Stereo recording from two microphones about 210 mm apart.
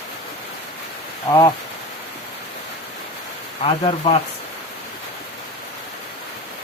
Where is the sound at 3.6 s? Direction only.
25° left (ahead or behind).